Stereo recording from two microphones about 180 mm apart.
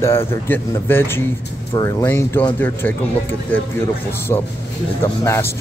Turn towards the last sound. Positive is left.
turn(degrees=15)  # may be behind; listen again after turning